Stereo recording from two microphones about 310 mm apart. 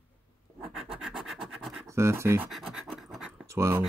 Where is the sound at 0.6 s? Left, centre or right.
Centre.